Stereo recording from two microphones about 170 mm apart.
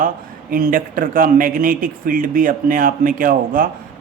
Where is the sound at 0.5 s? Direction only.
55° right (ahead or behind).